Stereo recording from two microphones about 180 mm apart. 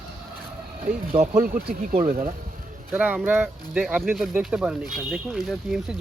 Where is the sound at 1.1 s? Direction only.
35° right (ahead or behind).